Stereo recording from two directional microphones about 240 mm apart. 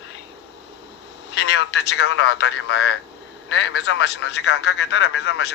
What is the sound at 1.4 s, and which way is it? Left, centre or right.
Telephone, left.